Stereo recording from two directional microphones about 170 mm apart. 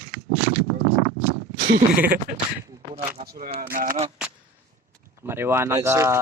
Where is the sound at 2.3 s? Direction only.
65° right (ahead or behind).